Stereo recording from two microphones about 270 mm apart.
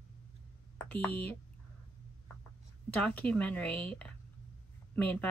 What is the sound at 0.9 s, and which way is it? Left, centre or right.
Speech, centre.